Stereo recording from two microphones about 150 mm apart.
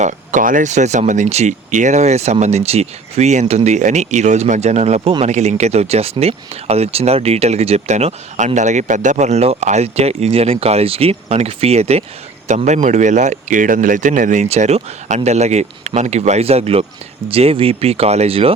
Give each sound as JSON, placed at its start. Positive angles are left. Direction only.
{"t": 0.0, "sound": "speech", "side_deg": -55}